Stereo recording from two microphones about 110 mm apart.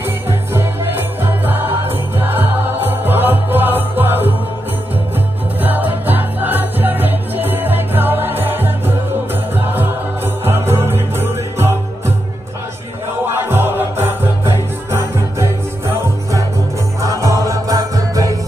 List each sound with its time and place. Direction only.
0.3 s music: 20° right (ahead or behind)
5.6 s music: 15° right (ahead or behind)
13.3 s music: 20° right (ahead or behind)
17.0 s music: 30° right (ahead or behind)